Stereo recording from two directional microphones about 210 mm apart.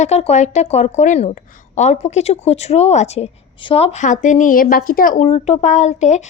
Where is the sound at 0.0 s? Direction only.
30° left (ahead or behind).